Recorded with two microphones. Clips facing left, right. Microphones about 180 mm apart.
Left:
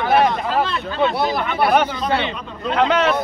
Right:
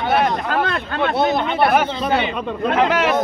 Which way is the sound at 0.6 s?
55° right (ahead or behind).